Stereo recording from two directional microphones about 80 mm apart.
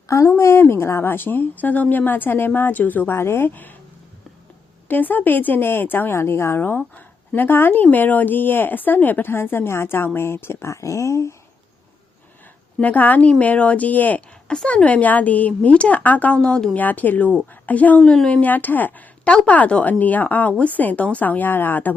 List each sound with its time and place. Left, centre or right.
0.1 s a woman's voice: left
4.9 s a woman's voice: left
12.8 s a woman's voice: left
14.5 s a woman's voice: centre